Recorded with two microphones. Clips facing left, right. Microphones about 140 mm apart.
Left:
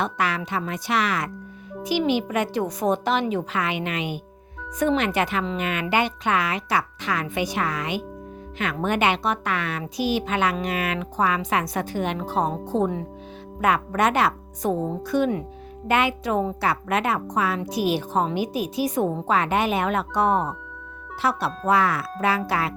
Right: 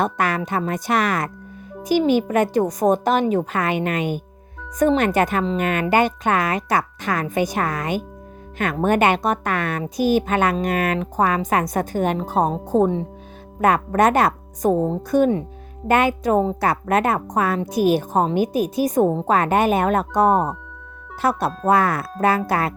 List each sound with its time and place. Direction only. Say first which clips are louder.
0.0 s a woman's voice: right 4 dB; 50° right (ahead or behind)